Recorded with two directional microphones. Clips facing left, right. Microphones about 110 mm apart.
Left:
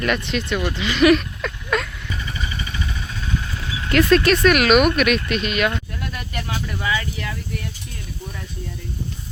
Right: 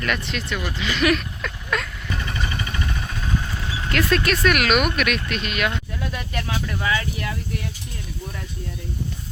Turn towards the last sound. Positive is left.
turn(degrees=-10)  # may be behind; listen again after turning